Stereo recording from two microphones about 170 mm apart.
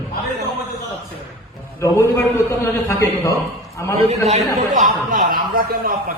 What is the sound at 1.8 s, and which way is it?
A man's voice, 15° left (ahead or behind).